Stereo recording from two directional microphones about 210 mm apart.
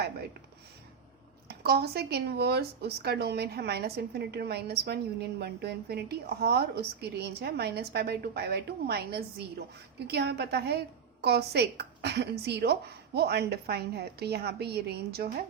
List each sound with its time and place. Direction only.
1.5 s a woman's voice: 50° right (ahead or behind)